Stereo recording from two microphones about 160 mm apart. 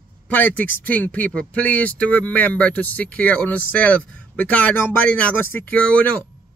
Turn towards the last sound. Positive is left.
turn(degrees=10)  # may be behind; listen again after turning